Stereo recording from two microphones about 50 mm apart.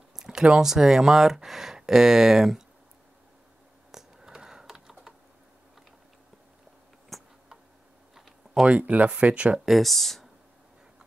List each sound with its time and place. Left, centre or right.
0.1 s speech: centre
3.9 s typing: centre
7.1 s a sound: centre
8.6 s speech: right
9.7 s speech: centre